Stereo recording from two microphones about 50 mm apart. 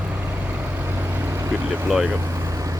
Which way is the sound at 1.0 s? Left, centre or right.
Right.